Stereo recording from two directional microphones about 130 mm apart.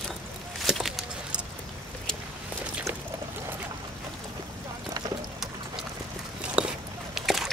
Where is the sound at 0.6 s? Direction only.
Centre (ahead or behind).